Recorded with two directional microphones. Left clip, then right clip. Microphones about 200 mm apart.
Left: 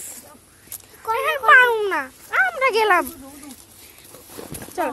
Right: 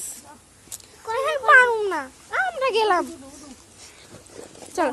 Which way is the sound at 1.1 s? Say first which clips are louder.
Left 2 dB; centre (ahead or behind).